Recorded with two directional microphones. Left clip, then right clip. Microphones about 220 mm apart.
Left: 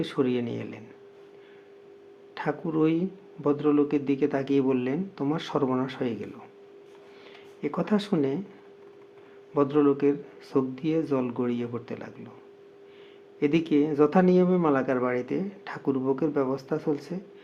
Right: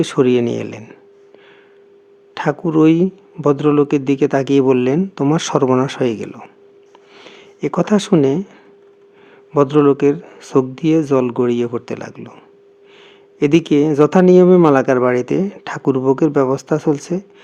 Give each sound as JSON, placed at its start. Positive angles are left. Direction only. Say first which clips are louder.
{"t": 0.0, "sound": "speech", "louder": "right 13 dB", "side_deg": -50}
{"t": 2.3, "sound": "speech", "louder": "right 12 dB", "side_deg": -50}
{"t": 9.6, "sound": "speech", "louder": "right 11 dB", "side_deg": -50}
{"t": 13.4, "sound": "speech", "louder": "right 11 dB", "side_deg": -50}